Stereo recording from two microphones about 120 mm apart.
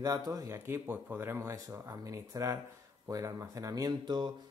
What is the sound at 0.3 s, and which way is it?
Speech, 25° right (ahead or behind).